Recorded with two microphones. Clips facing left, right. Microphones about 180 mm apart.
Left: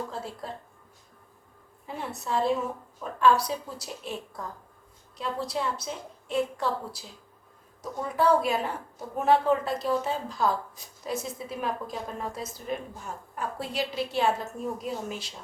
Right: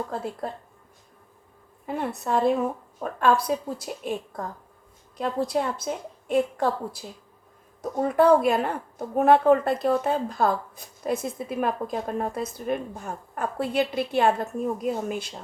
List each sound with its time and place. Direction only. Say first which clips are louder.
0.1 s a woman's voice: right 5 dB; 55° right (ahead or behind)
1.9 s a woman's voice: right 5 dB; 55° right (ahead or behind)